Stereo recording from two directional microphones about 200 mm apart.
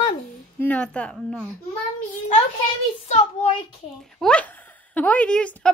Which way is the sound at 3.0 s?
30° left (ahead or behind).